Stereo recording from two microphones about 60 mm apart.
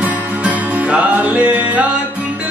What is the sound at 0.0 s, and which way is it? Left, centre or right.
Music, right.